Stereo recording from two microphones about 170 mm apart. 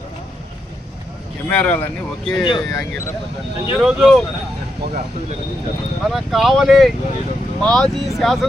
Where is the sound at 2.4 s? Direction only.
25° left (ahead or behind).